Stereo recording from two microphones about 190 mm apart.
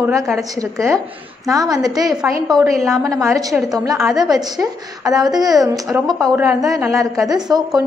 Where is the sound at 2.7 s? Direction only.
Centre (ahead or behind).